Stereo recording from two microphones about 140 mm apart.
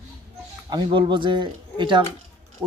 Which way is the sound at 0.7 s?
30° right (ahead or behind).